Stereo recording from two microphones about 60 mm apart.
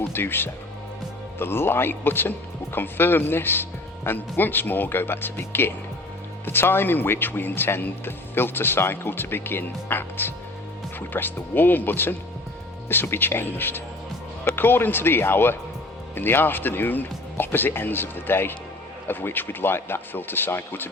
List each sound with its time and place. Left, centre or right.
0.1 s speech: left